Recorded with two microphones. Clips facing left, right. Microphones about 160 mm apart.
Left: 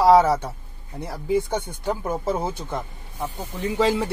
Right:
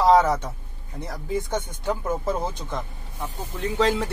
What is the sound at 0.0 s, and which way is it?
Speech, 10° left (ahead or behind).